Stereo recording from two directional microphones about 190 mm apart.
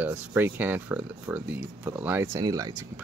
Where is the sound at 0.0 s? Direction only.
10° right (ahead or behind).